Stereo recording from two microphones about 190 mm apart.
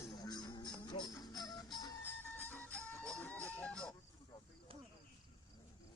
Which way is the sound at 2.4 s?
10° left (ahead or behind).